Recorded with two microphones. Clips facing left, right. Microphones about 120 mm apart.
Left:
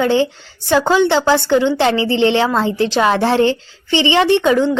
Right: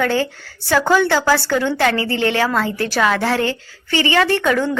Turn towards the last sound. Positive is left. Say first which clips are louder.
# left 4 dB
turn(degrees=20)  # may be behind; listen again after turning